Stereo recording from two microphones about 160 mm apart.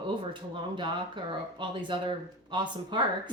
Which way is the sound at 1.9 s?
30° right (ahead or behind).